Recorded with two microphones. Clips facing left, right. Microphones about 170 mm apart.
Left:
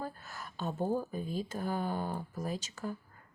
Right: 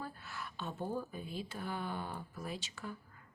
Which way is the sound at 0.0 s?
40° left (ahead or behind).